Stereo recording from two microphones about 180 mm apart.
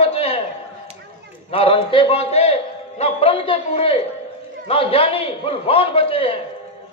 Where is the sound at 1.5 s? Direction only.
30° left (ahead or behind).